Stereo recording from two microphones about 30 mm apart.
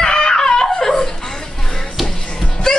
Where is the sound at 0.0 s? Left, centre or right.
Left.